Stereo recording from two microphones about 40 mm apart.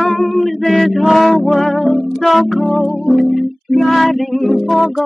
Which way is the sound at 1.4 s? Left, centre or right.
Centre.